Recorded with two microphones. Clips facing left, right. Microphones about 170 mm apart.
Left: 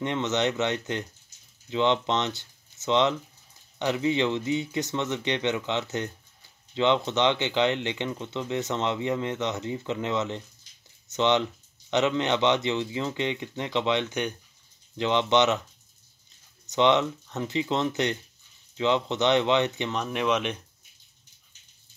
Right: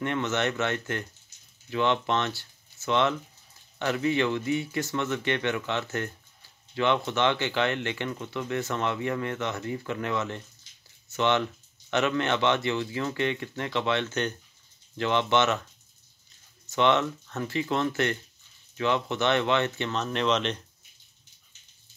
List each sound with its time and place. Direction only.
0.0 s speech: 20° left (ahead or behind)
16.6 s speech: 20° left (ahead or behind)